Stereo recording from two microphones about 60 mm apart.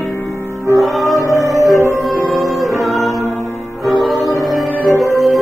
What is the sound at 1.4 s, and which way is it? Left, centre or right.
Music, right.